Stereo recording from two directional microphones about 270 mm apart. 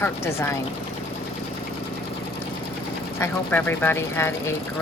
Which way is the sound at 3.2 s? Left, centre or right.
Centre.